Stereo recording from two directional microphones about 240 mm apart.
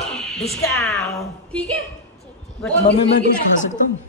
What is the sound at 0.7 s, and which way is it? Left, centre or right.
Speech, centre.